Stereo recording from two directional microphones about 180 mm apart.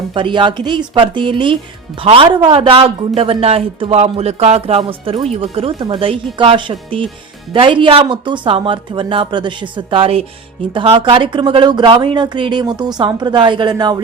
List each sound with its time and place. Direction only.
0.1 s a man's voice: 25° right (ahead or behind)